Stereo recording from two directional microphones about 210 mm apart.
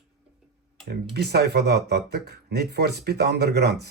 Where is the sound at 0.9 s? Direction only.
50° right (ahead or behind).